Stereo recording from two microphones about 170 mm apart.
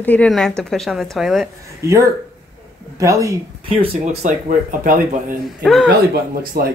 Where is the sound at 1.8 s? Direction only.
15° right (ahead or behind).